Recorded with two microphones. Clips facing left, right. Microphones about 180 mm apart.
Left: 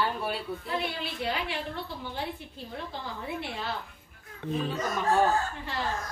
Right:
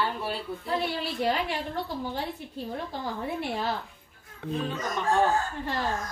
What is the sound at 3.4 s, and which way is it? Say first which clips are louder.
Speech: right 5 dB; 45° right (ahead or behind).